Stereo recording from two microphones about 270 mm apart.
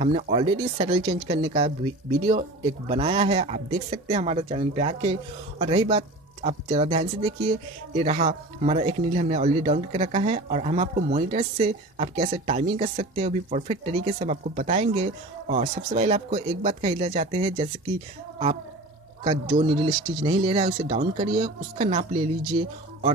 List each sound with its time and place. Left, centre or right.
0.0 s speech: right
19.2 s speech: right